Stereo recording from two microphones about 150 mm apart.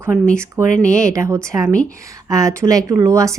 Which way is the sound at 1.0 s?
20° right (ahead or behind).